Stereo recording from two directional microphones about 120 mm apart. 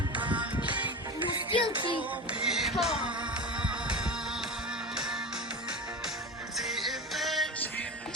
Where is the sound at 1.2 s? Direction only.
45° left (ahead or behind).